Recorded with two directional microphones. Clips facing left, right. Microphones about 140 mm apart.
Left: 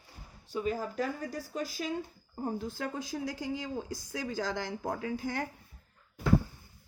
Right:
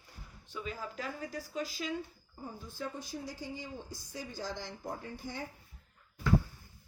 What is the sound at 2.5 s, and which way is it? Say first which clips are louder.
Speech: left 5 dB; 85° left.